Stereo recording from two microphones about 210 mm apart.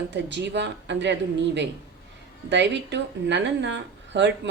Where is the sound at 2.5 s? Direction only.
55° right (ahead or behind).